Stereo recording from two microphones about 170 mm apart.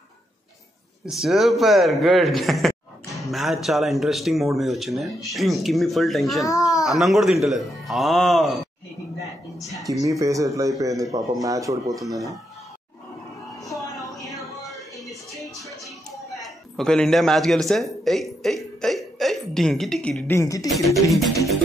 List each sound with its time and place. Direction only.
1.0 s a man's voice: centre (ahead or behind)
6.4 s a child's voice: 20° left (ahead or behind)
6.8 s a man's voice: centre (ahead or behind)
9.8 s speech: 20° right (ahead or behind)
14.2 s music: centre (ahead or behind)
16.3 s a man's voice: 5° left (ahead or behind); by 20.6 s 20° left (ahead or behind)
20.6 s a man's voice: centre (ahead or behind)